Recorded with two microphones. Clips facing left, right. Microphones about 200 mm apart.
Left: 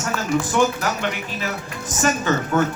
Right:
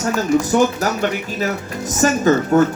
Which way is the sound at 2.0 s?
40° right (ahead or behind).